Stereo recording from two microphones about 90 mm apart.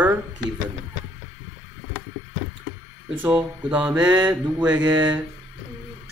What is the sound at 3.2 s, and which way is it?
Speech, 15° right (ahead or behind).